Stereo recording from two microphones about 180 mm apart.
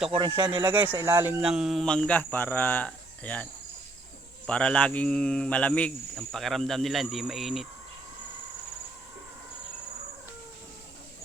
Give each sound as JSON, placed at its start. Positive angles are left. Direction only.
{"t": 0.3, "sound": "speech", "side_deg": -25}
{"t": 0.7, "sound": "speech", "side_deg": -10}
{"t": 4.4, "sound": "speech", "side_deg": 5}